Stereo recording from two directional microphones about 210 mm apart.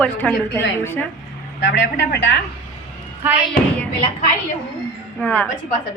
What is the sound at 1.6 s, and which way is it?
Speech, 55° left (ahead or behind).